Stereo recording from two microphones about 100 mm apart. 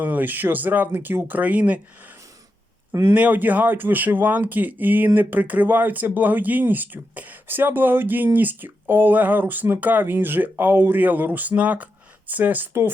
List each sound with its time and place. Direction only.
0.0 s speech: 15° right (ahead or behind)
2.9 s a man's voice: 30° right (ahead or behind)
3.2 s speech: 15° right (ahead or behind)